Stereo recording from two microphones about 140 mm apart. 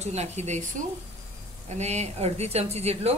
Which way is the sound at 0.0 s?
50° right (ahead or behind).